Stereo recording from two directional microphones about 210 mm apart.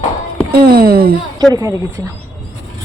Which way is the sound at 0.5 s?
45° right (ahead or behind).